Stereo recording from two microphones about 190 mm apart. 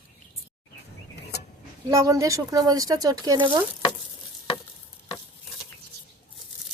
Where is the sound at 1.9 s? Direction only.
15° right (ahead or behind).